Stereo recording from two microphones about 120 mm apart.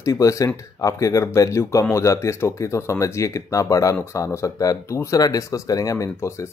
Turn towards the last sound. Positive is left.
turn(degrees=25)  # may be behind; listen again after turning